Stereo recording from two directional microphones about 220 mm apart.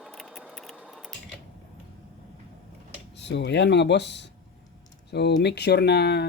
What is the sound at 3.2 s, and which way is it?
Speech, 50° left (ahead or behind).